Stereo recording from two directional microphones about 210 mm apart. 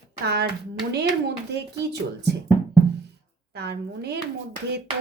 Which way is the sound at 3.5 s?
50° right (ahead or behind).